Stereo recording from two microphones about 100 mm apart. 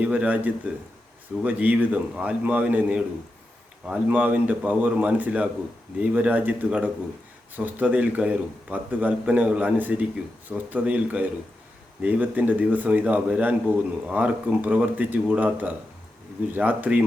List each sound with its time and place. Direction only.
0.0 s a man's voice: 15° right (ahead or behind)